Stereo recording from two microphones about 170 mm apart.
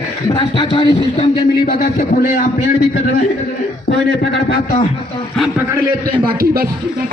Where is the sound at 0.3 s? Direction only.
30° left (ahead or behind).